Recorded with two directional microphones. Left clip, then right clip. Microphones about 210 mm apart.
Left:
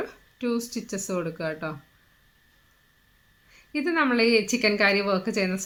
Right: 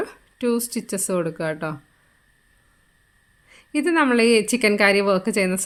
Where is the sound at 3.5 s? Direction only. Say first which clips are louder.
Right 5 dB; 50° right (ahead or behind).